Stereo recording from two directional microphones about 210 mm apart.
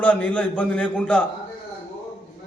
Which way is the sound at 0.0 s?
5° left (ahead or behind).